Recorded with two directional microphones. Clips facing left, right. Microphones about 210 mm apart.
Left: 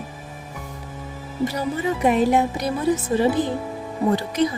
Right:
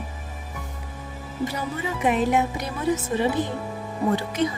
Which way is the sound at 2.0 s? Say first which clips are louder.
Left 3 dB; 35° left (ahead or behind).